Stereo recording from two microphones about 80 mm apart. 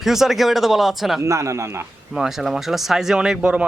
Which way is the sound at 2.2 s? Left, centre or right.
Centre.